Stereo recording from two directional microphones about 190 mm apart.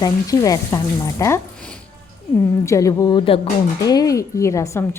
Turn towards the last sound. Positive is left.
turn(degrees=15)  # may be behind; listen again after turning